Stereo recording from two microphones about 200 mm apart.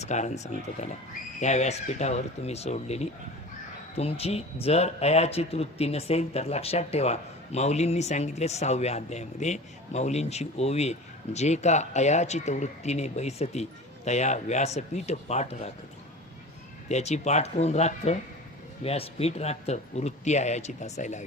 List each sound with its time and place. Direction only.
0.0 s speech: 35° left (ahead or behind)
16.9 s speech: 35° left (ahead or behind)